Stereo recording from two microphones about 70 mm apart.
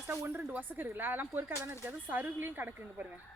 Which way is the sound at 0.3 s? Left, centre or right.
Right.